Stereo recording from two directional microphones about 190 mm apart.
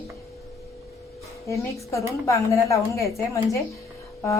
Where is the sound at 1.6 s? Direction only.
15° left (ahead or behind).